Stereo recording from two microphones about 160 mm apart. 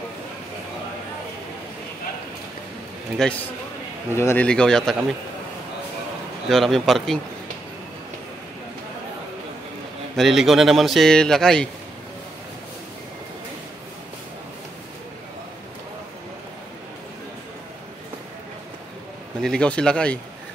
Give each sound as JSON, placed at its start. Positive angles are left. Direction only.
{"t": 3.2, "sound": "speech", "side_deg": 5}
{"t": 4.1, "sound": "speech", "side_deg": 15}
{"t": 6.5, "sound": "speech", "side_deg": 0}
{"t": 10.1, "sound": "speech", "side_deg": 0}
{"t": 19.4, "sound": "speech", "side_deg": 5}